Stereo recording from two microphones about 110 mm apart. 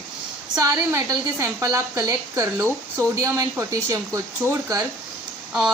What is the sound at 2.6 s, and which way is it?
Speech, 20° right (ahead or behind).